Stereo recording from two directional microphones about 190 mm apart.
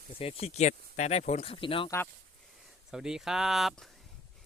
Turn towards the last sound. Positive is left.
turn(degrees=0)  # may be behind; listen again after turning